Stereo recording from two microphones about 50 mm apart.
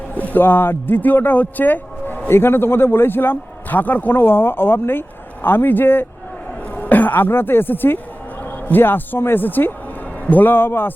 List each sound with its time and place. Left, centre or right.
0.2 s speech: left
6.7 s speech: left